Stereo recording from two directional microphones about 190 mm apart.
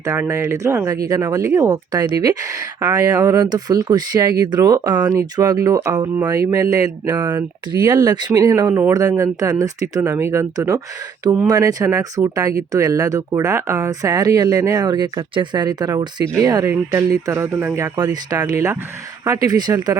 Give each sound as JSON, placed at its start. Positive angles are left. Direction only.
{"t": 0.0, "sound": "speech", "side_deg": -15}